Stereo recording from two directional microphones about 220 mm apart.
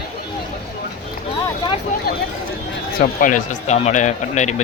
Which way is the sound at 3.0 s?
35° left (ahead or behind).